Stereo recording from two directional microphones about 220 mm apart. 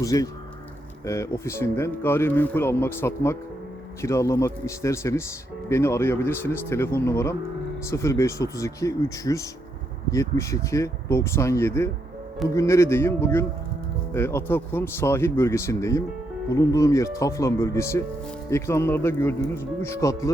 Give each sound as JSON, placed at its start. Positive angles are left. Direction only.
{"t": 0.0, "sound": "speech", "side_deg": 15}